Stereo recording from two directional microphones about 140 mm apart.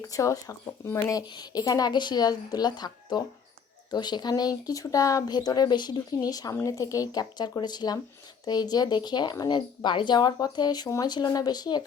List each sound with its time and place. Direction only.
0.1 s speech: 25° left (ahead or behind)